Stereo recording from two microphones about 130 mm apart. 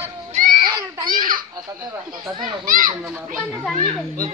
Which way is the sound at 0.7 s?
30° right (ahead or behind).